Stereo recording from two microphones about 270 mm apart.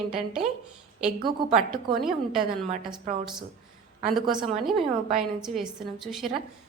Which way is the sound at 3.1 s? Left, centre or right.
Right.